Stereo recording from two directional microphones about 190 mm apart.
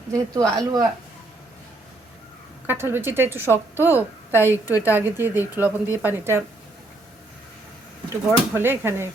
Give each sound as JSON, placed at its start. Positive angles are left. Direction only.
{"t": 0.1, "sound": "a woman's voice", "side_deg": -15}
{"t": 2.6, "sound": "a woman's voice", "side_deg": -10}
{"t": 4.4, "sound": "a woman's voice", "side_deg": 15}
{"t": 4.9, "sound": "a woman's voice", "side_deg": -10}
{"t": 8.3, "sound": "a woman's voice", "side_deg": -10}